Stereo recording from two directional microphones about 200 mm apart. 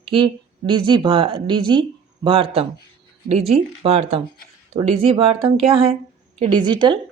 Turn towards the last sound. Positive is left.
turn(degrees=-25)  # may be behind; listen again after turning